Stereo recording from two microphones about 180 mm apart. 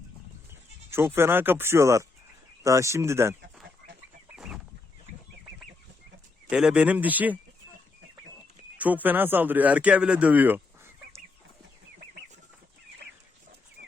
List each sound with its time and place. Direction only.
0.9 s speech: 15° right (ahead or behind)
4.4 s chicken: centre (ahead or behind)
6.5 s speech: 5° right (ahead or behind)
8.8 s speech: 10° right (ahead or behind)